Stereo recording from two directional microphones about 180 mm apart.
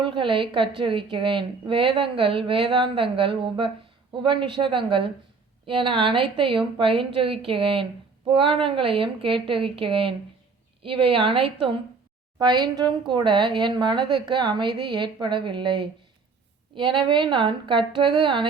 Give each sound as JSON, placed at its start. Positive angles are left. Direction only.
{"t": 0.0, "sound": "a woman's voice", "side_deg": -25}